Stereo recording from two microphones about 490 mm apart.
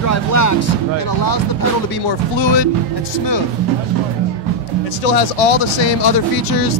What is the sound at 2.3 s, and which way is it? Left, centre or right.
Speech, left.